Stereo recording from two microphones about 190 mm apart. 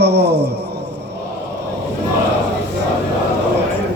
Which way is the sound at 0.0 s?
60° right (ahead or behind).